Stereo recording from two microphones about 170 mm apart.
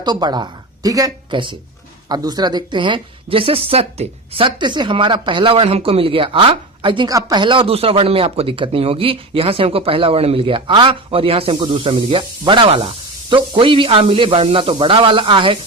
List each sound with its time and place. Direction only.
0.0 s a woman's voice: 25° right (ahead or behind)